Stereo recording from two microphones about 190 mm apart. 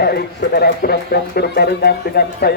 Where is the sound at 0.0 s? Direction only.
55° left (ahead or behind).